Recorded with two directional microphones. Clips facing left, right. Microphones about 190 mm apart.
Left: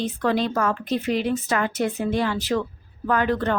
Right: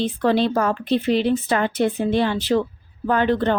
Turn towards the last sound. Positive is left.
turn(degrees=-30)  # may be behind; listen again after turning